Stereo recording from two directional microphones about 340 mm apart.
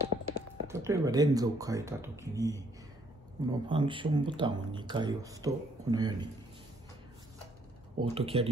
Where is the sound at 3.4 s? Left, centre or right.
Centre.